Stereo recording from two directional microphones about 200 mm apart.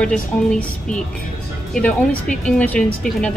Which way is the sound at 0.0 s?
5° left (ahead or behind).